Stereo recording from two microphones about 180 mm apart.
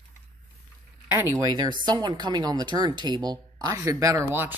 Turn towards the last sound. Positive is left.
turn(degrees=-10)  # may be behind; listen again after turning